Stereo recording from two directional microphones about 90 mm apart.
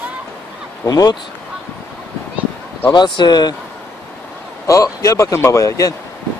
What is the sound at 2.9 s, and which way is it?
Speech, 55° left (ahead or behind).